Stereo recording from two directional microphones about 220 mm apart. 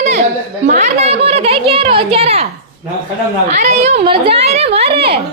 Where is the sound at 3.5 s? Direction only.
30° right (ahead or behind).